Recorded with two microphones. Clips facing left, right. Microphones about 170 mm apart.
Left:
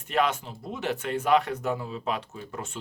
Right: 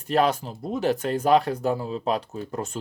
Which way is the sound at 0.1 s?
35° right (ahead or behind).